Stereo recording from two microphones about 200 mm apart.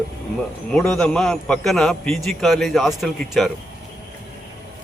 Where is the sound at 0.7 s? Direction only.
5° left (ahead or behind).